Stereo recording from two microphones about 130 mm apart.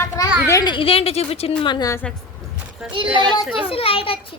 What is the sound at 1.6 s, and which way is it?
Speech, 35° left (ahead or behind).